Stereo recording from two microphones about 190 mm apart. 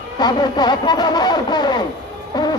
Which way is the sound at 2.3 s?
20° left (ahead or behind).